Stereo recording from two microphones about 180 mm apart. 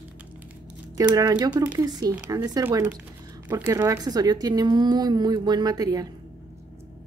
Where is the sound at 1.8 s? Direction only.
20° right (ahead or behind).